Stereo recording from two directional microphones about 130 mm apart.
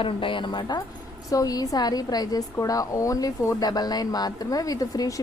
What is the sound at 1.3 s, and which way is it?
A woman's voice, 30° left (ahead or behind).